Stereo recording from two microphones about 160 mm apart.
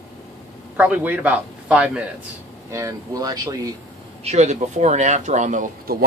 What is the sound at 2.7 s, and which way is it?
Speech, 20° right (ahead or behind).